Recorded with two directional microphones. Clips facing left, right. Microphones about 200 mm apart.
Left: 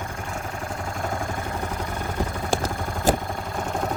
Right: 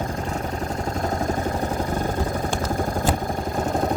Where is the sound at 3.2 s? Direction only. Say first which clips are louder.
Right 5 dB; 40° right (ahead or behind).